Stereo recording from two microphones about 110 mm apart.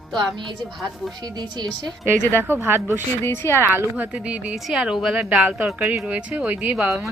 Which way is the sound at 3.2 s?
20° left (ahead or behind).